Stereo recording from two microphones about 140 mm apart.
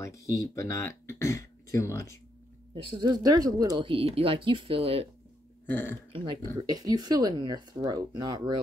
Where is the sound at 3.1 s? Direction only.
25° right (ahead or behind); by 5.1 s 45° right (ahead or behind).